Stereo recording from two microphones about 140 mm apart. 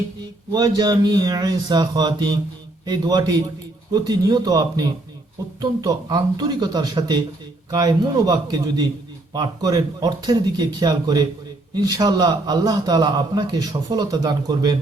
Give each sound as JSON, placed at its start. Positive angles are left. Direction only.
{"t": 0.5, "sound": "a man's voice", "side_deg": -30}